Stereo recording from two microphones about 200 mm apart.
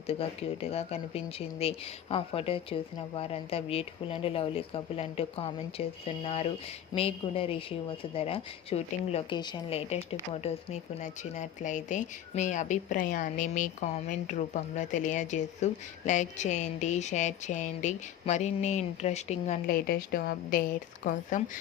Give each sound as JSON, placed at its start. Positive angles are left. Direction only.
{"t": 0.1, "sound": "a woman's voice", "side_deg": 30}
{"t": 19.7, "sound": "a woman's voice", "side_deg": 50}